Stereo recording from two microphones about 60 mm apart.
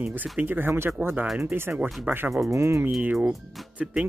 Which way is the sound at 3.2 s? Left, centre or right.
Centre.